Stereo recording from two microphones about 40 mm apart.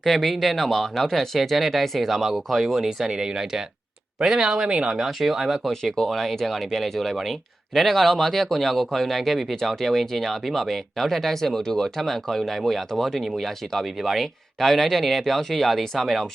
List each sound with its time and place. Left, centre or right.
0.0 s speech: centre
3.1 s speech: centre